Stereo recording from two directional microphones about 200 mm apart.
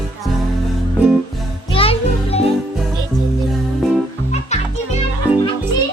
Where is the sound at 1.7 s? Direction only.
30° left (ahead or behind).